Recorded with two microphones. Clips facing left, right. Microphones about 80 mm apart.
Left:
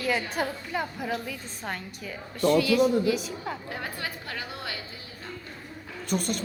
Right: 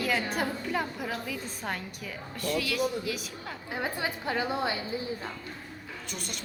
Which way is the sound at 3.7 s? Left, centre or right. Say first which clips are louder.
Right 2 dB; centre.